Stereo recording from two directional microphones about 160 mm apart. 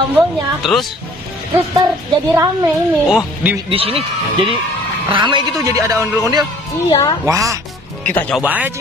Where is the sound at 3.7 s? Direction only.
35° right (ahead or behind).